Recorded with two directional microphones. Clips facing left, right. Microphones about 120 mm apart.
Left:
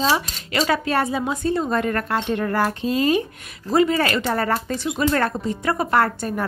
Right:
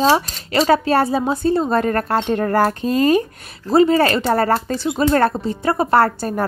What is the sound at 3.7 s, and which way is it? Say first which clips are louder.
Speech: right 5 dB; 35° right (ahead or behind).